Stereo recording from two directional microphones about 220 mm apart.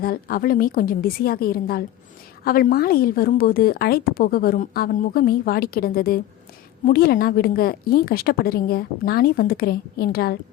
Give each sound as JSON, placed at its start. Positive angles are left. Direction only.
{"t": 0.0, "sound": "a woman's voice", "side_deg": 40}